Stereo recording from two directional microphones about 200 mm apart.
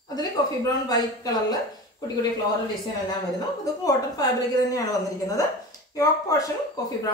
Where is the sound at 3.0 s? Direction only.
20° left (ahead or behind).